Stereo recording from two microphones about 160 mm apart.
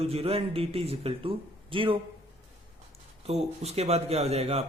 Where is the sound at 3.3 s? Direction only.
40° right (ahead or behind).